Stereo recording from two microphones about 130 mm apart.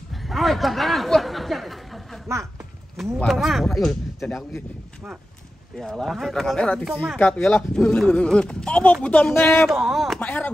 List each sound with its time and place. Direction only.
0.1 s a sound: centre (ahead or behind)
2.3 s speech: 20° right (ahead or behind)
3.2 s speech: centre (ahead or behind)
5.8 s speech: centre (ahead or behind)
9.7 s speech: 5° right (ahead or behind)